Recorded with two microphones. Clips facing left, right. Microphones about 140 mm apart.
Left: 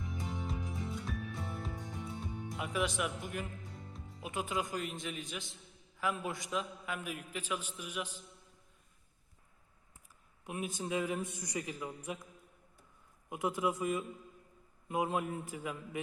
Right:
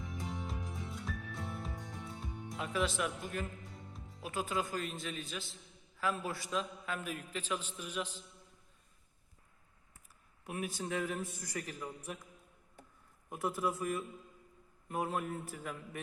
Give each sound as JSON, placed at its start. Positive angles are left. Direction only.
{"t": 0.0, "sound": "music", "side_deg": 0}
{"t": 2.7, "sound": "a man's voice", "side_deg": 15}
{"t": 3.6, "sound": "music", "side_deg": 0}
{"t": 4.2, "sound": "a man's voice", "side_deg": 20}
{"t": 10.4, "sound": "a man's voice", "side_deg": 15}
{"t": 13.3, "sound": "a man's voice", "side_deg": 15}
{"t": 14.8, "sound": "a man's voice", "side_deg": 15}